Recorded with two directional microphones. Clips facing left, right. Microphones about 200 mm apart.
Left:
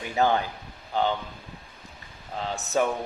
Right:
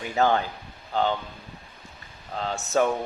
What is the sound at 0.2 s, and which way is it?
Speech, 15° left (ahead or behind).